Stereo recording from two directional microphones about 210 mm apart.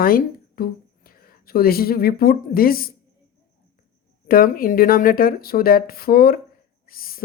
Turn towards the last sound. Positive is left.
turn(degrees=45)  # may be behind; listen again after turning